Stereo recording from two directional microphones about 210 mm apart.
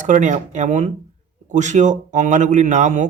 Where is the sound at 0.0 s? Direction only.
35° right (ahead or behind).